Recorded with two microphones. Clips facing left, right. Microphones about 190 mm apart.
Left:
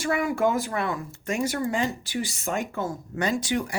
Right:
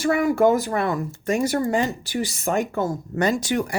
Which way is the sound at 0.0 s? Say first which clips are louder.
Right 6 dB; 40° right (ahead or behind).